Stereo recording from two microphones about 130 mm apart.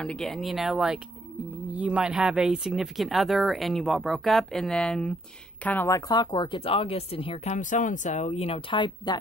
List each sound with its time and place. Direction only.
0.0 s speech: 5° left (ahead or behind)
5.9 s speech: 30° left (ahead or behind); by 7.3 s 50° left (ahead or behind)
7.4 s speech: 70° left (ahead or behind); by 8.7 s 55° left (ahead or behind)
8.7 s speech: 35° left (ahead or behind)